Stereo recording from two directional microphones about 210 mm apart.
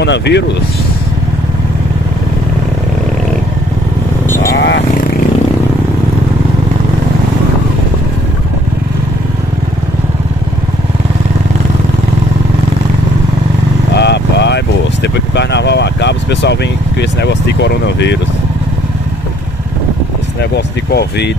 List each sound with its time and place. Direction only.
0.0 s speech: 55° left (ahead or behind)
4.3 s vehicle: 15° left (ahead or behind)
4.6 s speech: 55° left (ahead or behind)
13.9 s vehicle: 55° left (ahead or behind)
17.0 s speech: 55° left (ahead or behind)
20.5 s speech: 50° left (ahead or behind)